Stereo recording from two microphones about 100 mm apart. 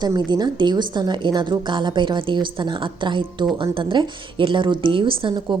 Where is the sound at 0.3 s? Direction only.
45° right (ahead or behind).